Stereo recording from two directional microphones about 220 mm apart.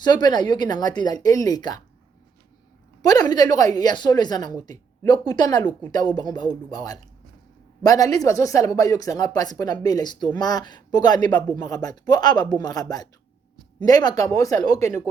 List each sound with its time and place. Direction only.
0.0 s speech: 20° left (ahead or behind)
3.0 s speech: 15° left (ahead or behind)